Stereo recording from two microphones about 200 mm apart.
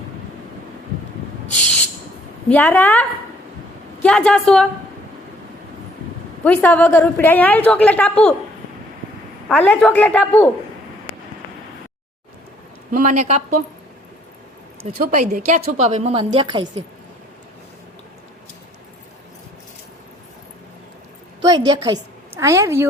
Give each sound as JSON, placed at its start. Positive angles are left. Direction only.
{"t": 2.5, "sound": "a woman's voice", "side_deg": 10}
{"t": 6.4, "sound": "a woman's voice", "side_deg": 10}
{"t": 9.5, "sound": "a woman's voice", "side_deg": 5}
{"t": 12.9, "sound": "a woman's voice", "side_deg": -40}
{"t": 14.8, "sound": "a woman's voice", "side_deg": -35}
{"t": 21.4, "sound": "a woman's voice", "side_deg": -20}